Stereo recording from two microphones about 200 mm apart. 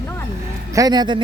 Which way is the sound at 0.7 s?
20° right (ahead or behind).